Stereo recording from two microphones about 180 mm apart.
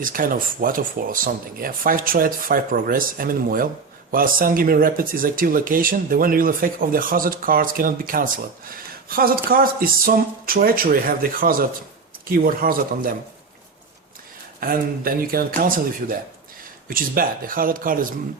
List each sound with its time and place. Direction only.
0.0 s speech: 50° right (ahead or behind)
14.6 s speech: 55° right (ahead or behind)